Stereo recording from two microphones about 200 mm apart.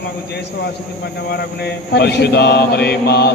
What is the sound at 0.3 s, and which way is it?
Chant, 55° left (ahead or behind).